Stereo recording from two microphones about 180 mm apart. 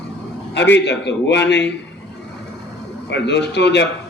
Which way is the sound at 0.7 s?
75° left (ahead or behind).